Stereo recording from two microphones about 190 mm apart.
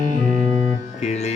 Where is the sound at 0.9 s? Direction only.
35° left (ahead or behind).